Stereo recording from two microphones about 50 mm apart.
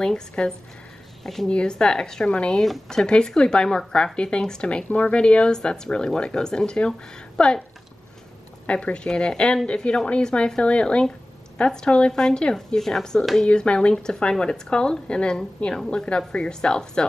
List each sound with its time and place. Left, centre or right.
0.0 s speech: centre
1.2 s a woman's voice: centre
1.5 s speech: centre
2.6 s speech: centre
8.6 s speech: left